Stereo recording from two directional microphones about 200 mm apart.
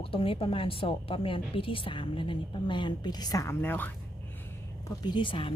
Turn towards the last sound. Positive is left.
turn(degrees=25)  # may be behind; listen again after turning